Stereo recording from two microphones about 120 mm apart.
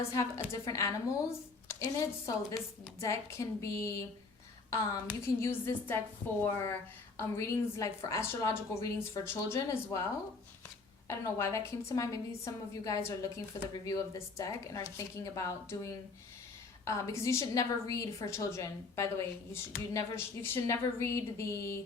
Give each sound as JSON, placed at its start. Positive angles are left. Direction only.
{"t": 0.0, "sound": "a woman's voice", "side_deg": 25}
{"t": 5.2, "sound": "a woman's voice", "side_deg": 20}
{"t": 11.1, "sound": "a woman's voice", "side_deg": 25}